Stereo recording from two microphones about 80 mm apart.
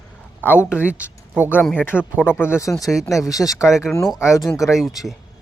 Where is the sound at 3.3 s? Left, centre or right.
Left.